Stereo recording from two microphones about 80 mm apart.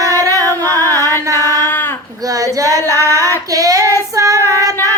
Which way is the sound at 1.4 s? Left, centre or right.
Left.